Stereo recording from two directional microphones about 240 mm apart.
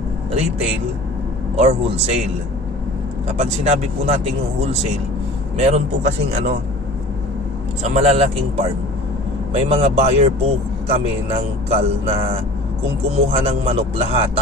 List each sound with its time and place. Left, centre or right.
0.3 s speech: right
3.3 s speech: right
7.8 s speech: right